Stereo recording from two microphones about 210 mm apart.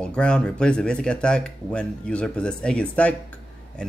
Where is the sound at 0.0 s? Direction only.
5° left (ahead or behind).